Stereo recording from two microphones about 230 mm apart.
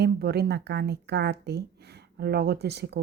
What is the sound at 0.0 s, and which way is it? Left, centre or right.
A woman's voice, right.